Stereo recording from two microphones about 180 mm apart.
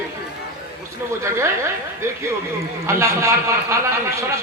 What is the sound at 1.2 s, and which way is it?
Speech, 15° right (ahead or behind).